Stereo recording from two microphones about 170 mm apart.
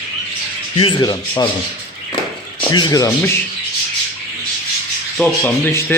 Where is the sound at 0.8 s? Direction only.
30° left (ahead or behind).